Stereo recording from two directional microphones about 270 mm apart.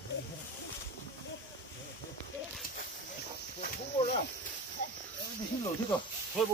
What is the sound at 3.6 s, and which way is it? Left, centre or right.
Snake, left.